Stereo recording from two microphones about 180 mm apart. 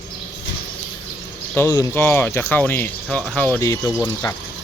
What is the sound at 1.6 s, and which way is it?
Speech, 15° left (ahead or behind).